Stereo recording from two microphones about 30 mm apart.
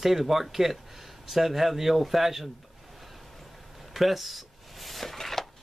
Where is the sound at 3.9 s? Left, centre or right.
Centre.